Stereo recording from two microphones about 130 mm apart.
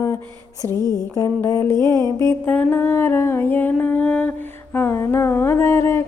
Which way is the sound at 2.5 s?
15° left (ahead or behind).